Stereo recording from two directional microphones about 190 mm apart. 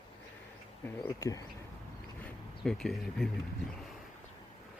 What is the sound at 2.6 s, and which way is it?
Speech, centre (ahead or behind).